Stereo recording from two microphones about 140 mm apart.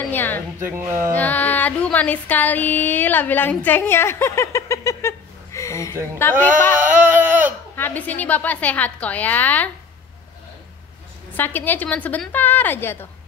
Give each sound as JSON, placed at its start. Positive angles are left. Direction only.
{"t": 0.0, "sound": "a sound", "side_deg": 15}
{"t": 0.6, "sound": "speech", "side_deg": -15}
{"t": 1.1, "sound": "female singing", "side_deg": 10}
{"t": 6.2, "sound": "a woman's voice", "side_deg": 15}
{"t": 6.8, "sound": "a sound", "side_deg": -15}
{"t": 7.7, "sound": "a woman's voice", "side_deg": 15}
{"t": 11.3, "sound": "a woman's voice", "side_deg": 15}